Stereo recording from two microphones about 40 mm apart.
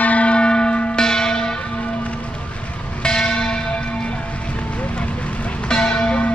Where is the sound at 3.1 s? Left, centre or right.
Centre.